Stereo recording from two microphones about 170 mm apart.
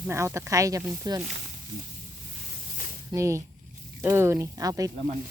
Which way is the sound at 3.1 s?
15° right (ahead or behind).